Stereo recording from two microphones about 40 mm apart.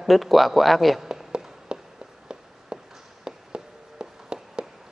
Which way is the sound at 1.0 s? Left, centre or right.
Centre.